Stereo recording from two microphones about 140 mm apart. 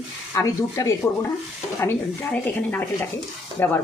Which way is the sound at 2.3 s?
10° left (ahead or behind).